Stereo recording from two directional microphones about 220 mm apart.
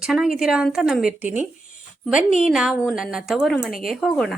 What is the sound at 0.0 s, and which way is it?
Speech, 5° right (ahead or behind).